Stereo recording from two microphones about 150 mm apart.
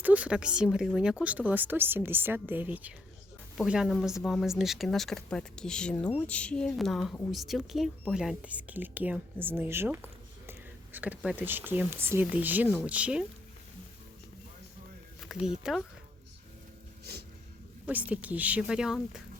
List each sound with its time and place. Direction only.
0.0 s a woman's voice: 10° right (ahead or behind)
15.4 s speech: centre (ahead or behind)
17.0 s a sound: 90° right
17.8 s a woman's voice: 10° right (ahead or behind)